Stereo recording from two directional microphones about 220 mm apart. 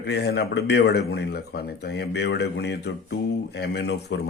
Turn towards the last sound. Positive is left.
turn(degrees=50)  # may be behind; listen again after turning